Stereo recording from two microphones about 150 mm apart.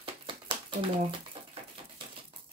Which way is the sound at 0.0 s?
35° right (ahead or behind).